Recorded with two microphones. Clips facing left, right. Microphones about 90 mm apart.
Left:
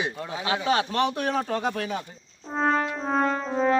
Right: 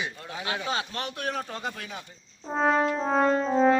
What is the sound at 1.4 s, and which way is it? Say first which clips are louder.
Speech: left 8 dB; 65° left (ahead or behind).